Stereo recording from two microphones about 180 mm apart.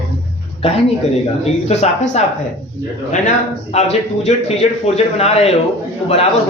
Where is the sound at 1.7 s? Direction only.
40° left (ahead or behind).